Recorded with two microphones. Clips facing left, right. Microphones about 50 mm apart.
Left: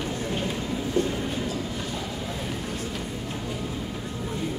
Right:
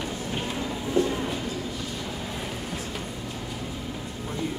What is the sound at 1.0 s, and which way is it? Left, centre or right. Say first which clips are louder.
Train: right 2 dB; left.